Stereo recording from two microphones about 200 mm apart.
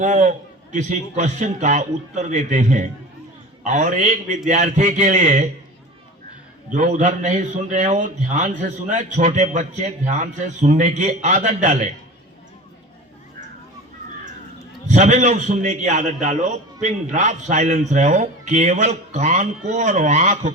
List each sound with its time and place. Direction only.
0.0 s a man's voice: 35° right (ahead or behind)
6.7 s a man's voice: 35° right (ahead or behind)
14.8 s a man's voice: 35° right (ahead or behind)